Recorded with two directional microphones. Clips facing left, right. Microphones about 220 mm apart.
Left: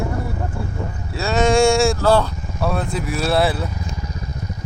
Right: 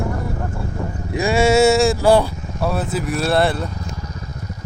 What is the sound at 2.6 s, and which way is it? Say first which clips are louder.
Speech: right 1 dB; 5° right (ahead or behind).